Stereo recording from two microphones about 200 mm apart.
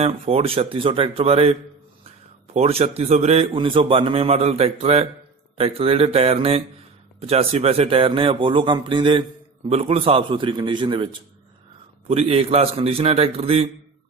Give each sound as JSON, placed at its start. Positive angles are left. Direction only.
{"t": 0.0, "sound": "a man's voice", "side_deg": -30}
{"t": 12.1, "sound": "speech", "side_deg": -30}